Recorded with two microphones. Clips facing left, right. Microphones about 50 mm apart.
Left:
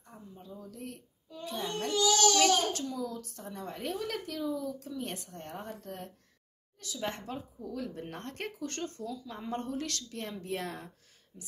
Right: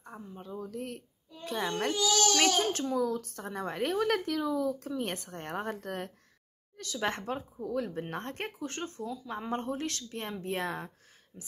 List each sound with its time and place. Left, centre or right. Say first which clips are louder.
0.0 s a woman's voice: right 5 dB; right
4.7 s a woman's voice: right 4 dB; right
11.3 s a sound: right 1 dB; right